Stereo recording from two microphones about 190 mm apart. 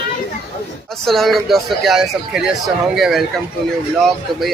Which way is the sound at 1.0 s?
Centre (ahead or behind).